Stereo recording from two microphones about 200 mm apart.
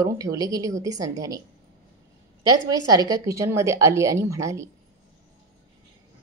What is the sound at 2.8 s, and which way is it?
A woman's voice, 20° right (ahead or behind).